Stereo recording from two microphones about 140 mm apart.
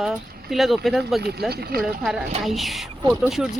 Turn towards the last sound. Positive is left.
turn(degrees=0)  # may be behind; listen again after turning